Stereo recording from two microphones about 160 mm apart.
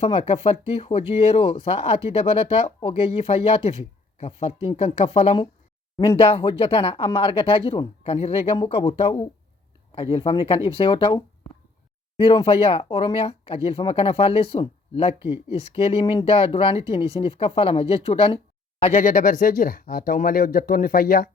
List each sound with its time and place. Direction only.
0.0 s speech: 35° left (ahead or behind)
19.0 s speech: 55° left (ahead or behind)